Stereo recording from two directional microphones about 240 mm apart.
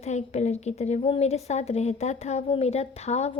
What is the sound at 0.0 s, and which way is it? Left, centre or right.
A woman's voice, left.